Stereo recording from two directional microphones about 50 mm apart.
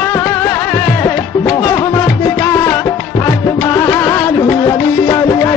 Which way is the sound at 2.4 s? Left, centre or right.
Left.